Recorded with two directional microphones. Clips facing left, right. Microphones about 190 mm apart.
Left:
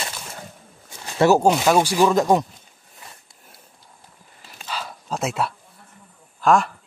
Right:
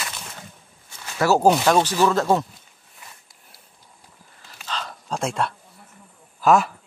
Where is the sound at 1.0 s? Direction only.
25° left (ahead or behind).